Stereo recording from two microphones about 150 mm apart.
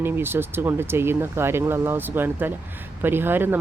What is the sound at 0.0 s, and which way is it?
Speech, 15° right (ahead or behind).